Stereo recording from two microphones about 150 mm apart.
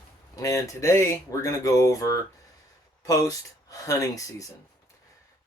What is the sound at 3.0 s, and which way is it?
Speech, 20° left (ahead or behind).